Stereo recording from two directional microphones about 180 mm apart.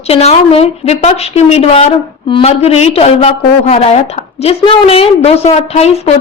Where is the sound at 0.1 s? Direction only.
35° left (ahead or behind).